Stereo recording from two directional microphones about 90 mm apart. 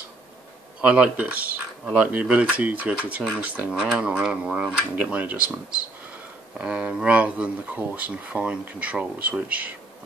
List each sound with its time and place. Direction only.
0.7 s speech: 15° right (ahead or behind)
3.7 s speech: 5° right (ahead or behind)